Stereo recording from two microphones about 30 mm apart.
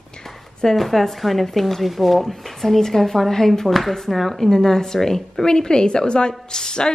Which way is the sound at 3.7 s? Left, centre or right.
Centre.